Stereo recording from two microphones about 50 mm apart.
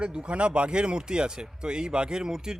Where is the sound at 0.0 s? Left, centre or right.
Right.